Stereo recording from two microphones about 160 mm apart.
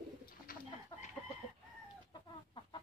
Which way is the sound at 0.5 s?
60° left (ahead or behind).